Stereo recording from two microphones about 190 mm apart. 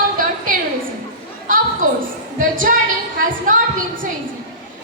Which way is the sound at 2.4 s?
45° right (ahead or behind).